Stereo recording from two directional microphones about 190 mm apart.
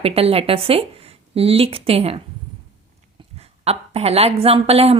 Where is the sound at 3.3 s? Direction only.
30° right (ahead or behind).